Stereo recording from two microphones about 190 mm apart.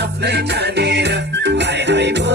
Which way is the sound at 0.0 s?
60° right (ahead or behind).